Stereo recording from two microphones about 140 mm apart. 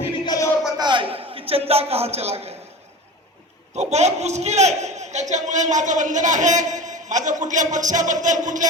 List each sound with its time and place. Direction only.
0.1 s music: 25° left (ahead or behind)
0.8 s a sound: 35° right (ahead or behind)
3.8 s a man's voice: 55° right (ahead or behind)